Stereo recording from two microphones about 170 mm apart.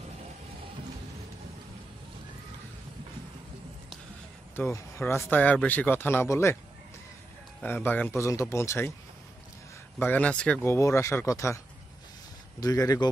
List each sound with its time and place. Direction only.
4.6 s speech: 15° left (ahead or behind)
7.6 s speech: 10° left (ahead or behind)
9.9 s speech: 10° left (ahead or behind)